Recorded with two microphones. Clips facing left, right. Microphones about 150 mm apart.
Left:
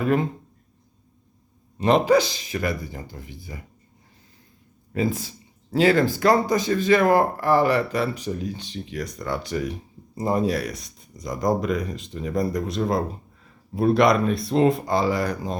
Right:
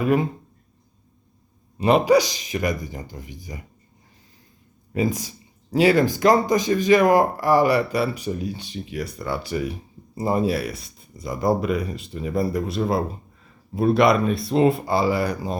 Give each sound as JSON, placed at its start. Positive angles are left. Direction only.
{"t": 0.0, "sound": "speech", "side_deg": -10}
{"t": 1.8, "sound": "speech", "side_deg": -10}
{"t": 4.9, "sound": "speech", "side_deg": -15}